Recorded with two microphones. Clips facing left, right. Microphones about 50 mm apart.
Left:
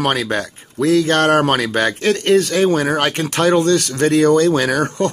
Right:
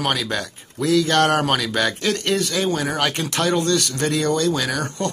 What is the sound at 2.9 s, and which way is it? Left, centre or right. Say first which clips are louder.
Speech: left 4 dB; left.